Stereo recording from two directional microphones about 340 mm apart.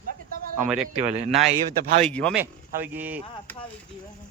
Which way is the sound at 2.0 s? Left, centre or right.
Centre.